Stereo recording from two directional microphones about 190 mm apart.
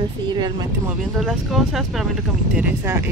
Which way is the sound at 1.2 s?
5° right (ahead or behind).